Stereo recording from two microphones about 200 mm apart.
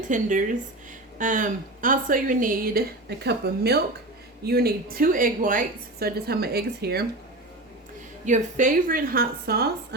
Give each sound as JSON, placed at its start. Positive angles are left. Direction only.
{"t": 0.1, "sound": "a woman's voice", "side_deg": -40}
{"t": 8.2, "sound": "a woman's voice", "side_deg": -40}